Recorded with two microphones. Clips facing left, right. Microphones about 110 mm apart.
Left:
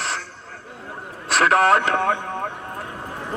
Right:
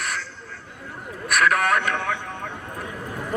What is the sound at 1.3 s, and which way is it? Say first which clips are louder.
Speech: left 4 dB; 30° left (ahead or behind).